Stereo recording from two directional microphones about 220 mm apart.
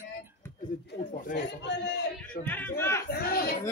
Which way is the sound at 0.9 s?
50° left (ahead or behind).